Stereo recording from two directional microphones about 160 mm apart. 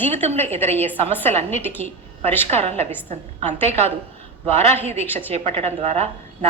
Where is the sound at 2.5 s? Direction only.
40° right (ahead or behind).